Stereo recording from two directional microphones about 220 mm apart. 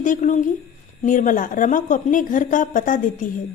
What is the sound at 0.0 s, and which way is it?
A woman's voice, 35° left (ahead or behind).